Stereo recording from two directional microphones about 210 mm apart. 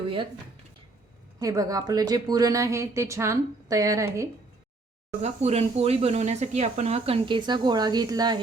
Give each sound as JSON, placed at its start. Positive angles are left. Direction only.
{"t": 1.4, "sound": "a woman's voice", "side_deg": -15}
{"t": 5.2, "sound": "speech", "side_deg": -30}